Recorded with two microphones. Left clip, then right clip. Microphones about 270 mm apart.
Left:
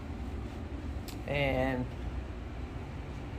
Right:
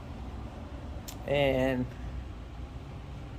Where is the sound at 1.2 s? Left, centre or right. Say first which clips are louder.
Right 4 dB; centre.